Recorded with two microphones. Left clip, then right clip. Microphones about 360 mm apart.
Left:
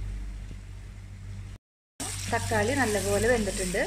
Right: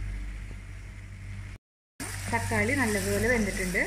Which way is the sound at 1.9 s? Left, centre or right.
Left.